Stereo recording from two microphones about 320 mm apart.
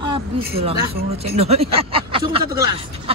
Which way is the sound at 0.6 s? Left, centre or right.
Centre.